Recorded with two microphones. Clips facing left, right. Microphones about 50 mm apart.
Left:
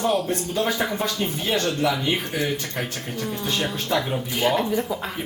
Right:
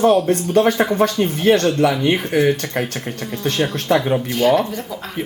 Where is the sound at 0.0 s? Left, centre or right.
Right.